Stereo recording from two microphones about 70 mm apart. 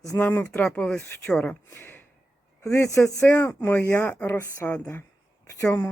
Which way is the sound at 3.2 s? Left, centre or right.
Left.